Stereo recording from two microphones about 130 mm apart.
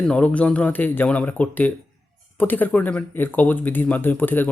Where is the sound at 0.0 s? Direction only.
10° left (ahead or behind).